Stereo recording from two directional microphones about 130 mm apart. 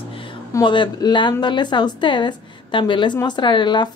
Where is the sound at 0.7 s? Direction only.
35° left (ahead or behind).